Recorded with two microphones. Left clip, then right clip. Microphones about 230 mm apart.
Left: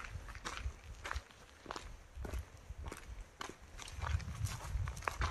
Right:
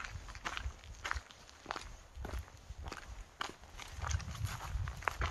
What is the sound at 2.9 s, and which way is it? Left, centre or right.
Walk, centre.